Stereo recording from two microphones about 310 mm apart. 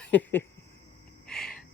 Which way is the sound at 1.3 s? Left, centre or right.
Centre.